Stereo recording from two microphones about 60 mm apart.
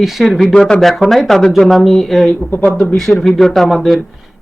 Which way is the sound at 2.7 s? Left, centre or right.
Centre.